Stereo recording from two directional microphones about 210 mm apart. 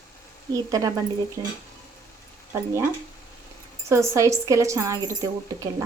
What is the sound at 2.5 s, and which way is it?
Speech, 15° right (ahead or behind).